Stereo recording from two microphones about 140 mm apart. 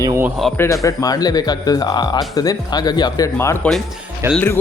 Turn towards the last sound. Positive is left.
turn(degrees=-20)  # may be behind; listen again after turning